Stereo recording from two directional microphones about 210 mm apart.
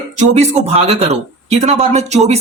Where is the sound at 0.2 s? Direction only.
30° right (ahead or behind).